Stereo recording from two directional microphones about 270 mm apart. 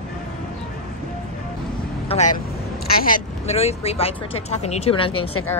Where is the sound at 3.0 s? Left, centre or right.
Left.